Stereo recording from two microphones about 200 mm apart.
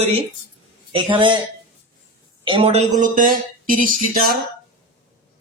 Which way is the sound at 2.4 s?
25° right (ahead or behind).